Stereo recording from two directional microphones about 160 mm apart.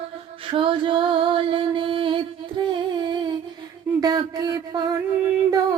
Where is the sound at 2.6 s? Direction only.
30° right (ahead or behind).